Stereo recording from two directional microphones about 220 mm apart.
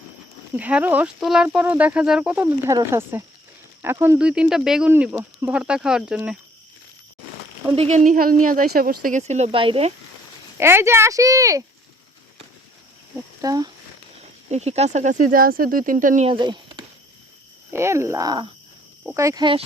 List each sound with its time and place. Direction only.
0.5 s speech: 5° right (ahead or behind)
7.8 s speech: 35° right (ahead or behind)
10.6 s speech: 10° right (ahead or behind)
13.1 s speech: 15° right (ahead or behind)
14.5 s speech: 30° right (ahead or behind)
17.7 s speech: 10° right (ahead or behind)